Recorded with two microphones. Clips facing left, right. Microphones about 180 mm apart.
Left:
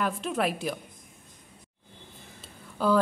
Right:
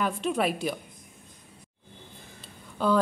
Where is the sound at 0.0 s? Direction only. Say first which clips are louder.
Right 1 dB; centre (ahead or behind).